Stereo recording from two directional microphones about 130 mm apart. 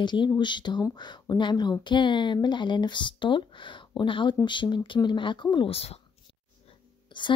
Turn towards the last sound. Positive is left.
turn(degrees=40)  # may be behind; listen again after turning